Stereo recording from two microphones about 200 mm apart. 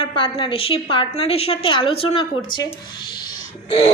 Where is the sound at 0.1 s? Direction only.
25° left (ahead or behind).